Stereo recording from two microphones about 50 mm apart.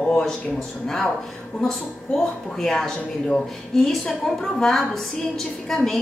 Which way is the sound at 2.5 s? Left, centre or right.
Centre.